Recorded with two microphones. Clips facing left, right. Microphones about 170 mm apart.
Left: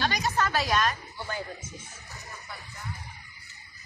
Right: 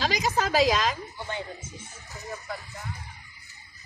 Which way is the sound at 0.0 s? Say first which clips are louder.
Right 1 dB; 90° right.